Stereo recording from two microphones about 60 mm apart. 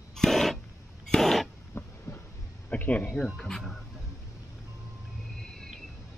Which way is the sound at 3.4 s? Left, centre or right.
Centre.